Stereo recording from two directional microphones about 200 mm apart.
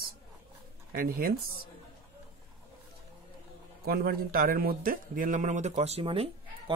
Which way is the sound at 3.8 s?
50° right (ahead or behind).